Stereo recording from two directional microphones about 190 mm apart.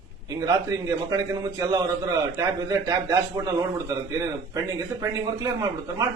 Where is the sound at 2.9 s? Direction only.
20° right (ahead or behind).